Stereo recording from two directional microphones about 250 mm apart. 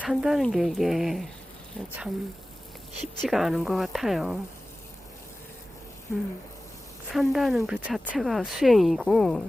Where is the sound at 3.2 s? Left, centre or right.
Centre.